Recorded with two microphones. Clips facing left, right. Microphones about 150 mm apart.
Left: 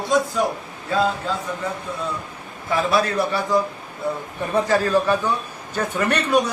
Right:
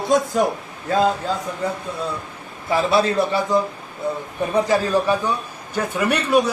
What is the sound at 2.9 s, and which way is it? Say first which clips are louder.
A man's voice: right 2 dB; 25° right (ahead or behind).